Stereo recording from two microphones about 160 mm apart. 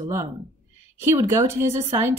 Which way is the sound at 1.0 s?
15° right (ahead or behind).